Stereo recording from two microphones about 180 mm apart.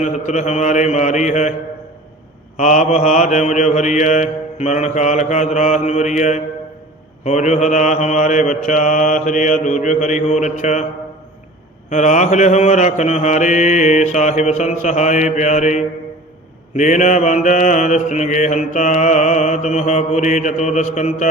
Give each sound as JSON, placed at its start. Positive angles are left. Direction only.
{"t": 0.0, "sound": "mantra", "side_deg": 40}
{"t": 2.6, "sound": "mantra", "side_deg": 40}
{"t": 11.9, "sound": "mantra", "side_deg": 40}